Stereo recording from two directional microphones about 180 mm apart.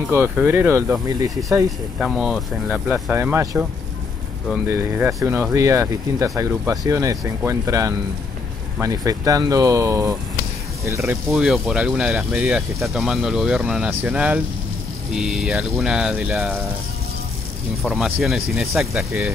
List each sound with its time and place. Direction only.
0.1 s speech: 10° right (ahead or behind)
2.0 s speech: centre (ahead or behind)
4.6 s speech: 10° right (ahead or behind)
11.2 s speech: centre (ahead or behind)
17.8 s speech: centre (ahead or behind)